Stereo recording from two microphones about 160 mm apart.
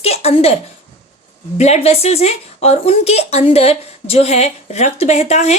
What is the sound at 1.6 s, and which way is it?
Speech, 40° left (ahead or behind).